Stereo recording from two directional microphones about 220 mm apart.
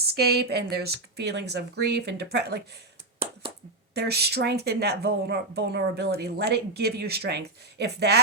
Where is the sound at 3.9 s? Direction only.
45° right (ahead or behind).